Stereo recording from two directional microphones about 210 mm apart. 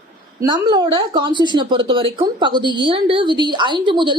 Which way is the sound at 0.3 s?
20° right (ahead or behind).